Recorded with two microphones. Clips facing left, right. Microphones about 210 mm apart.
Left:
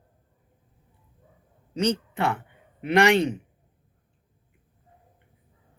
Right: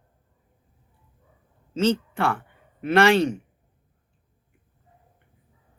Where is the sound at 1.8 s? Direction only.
20° left (ahead or behind).